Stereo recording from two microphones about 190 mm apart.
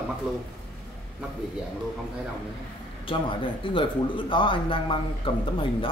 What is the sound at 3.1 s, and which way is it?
Speech, 25° left (ahead or behind).